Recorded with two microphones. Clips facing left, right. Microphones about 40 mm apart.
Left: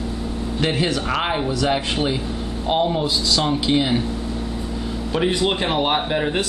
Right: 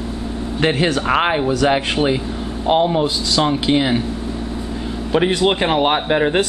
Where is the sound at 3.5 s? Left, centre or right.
Centre.